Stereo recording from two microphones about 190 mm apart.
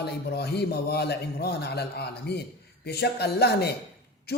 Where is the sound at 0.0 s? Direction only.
60° left (ahead or behind).